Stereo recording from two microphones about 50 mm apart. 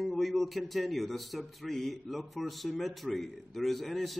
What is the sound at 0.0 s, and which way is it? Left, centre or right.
A man's voice, centre.